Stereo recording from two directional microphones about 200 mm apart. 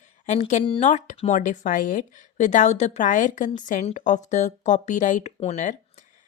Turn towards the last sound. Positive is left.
turn(degrees=35)  # may be behind; listen again after turning